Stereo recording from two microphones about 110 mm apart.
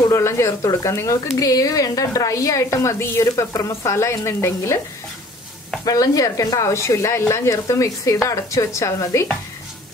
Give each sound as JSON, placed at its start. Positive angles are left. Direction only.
{"t": 0.1, "sound": "a woman's voice", "side_deg": 25}
{"t": 5.9, "sound": "a woman's voice", "side_deg": 35}